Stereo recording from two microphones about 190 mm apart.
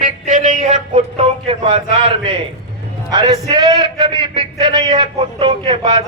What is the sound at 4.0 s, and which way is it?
A man's voice, 30° right (ahead or behind).